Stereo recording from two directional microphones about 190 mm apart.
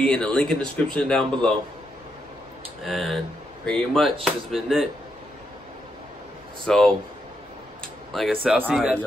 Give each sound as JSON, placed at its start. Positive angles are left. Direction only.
{"t": 0.0, "sound": "speech", "side_deg": 5}
{"t": 2.8, "sound": "speech", "side_deg": 0}
{"t": 6.6, "sound": "speech", "side_deg": 5}
{"t": 7.8, "sound": "a sound", "side_deg": 0}
{"t": 8.6, "sound": "speech", "side_deg": -10}